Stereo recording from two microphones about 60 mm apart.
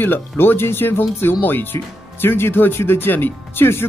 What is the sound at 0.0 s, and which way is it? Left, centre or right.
Speech, left.